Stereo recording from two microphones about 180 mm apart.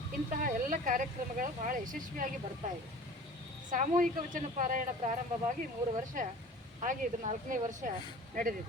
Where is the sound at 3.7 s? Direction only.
45° right (ahead or behind).